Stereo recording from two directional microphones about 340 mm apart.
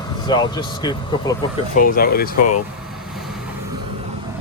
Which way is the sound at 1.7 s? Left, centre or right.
Left.